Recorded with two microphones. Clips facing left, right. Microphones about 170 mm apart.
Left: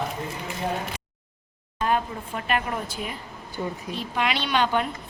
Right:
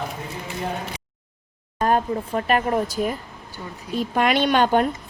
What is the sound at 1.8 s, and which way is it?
Speech, 40° right (ahead or behind).